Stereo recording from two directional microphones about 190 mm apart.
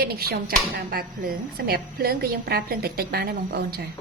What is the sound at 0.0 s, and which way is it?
Speech, 55° right (ahead or behind).